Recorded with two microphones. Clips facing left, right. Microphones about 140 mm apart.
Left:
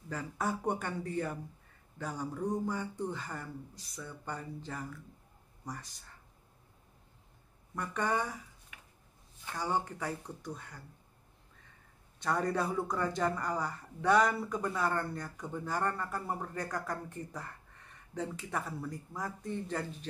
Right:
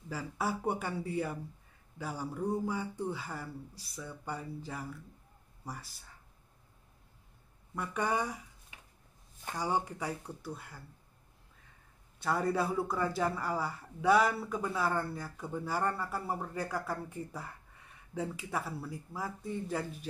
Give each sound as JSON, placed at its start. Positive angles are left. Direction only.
{"t": 0.1, "sound": "a man's voice", "side_deg": -5}
{"t": 7.7, "sound": "speech", "side_deg": -10}
{"t": 8.7, "sound": "a sound", "side_deg": -30}
{"t": 9.6, "sound": "speech", "side_deg": -10}
{"t": 12.2, "sound": "a man's voice", "side_deg": -5}